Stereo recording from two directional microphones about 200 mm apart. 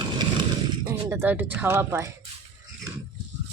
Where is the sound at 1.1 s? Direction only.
10° right (ahead or behind).